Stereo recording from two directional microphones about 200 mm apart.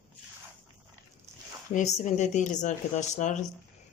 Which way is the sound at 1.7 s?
40° left (ahead or behind).